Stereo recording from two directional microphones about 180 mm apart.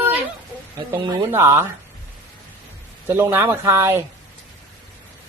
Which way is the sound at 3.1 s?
15° right (ahead or behind).